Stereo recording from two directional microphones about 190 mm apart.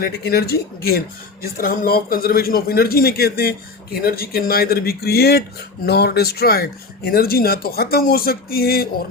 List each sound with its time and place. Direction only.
0.0 s speech: 55° left (ahead or behind)